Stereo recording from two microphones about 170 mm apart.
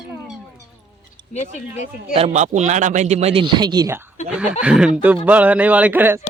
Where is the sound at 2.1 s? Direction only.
40° right (ahead or behind); by 3.9 s 25° right (ahead or behind).